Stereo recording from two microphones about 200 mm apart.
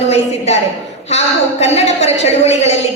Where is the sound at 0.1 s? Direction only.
35° left (ahead or behind).